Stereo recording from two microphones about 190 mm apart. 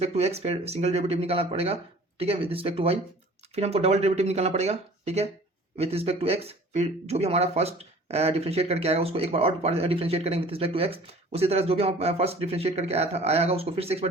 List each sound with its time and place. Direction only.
0.0 s speech: 35° right (ahead or behind)